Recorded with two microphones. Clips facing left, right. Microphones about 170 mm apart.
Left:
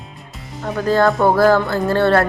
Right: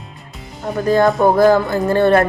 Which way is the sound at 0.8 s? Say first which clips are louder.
Right 2 dB; 15° right (ahead or behind).